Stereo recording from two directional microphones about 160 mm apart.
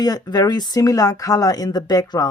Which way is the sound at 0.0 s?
25° left (ahead or behind).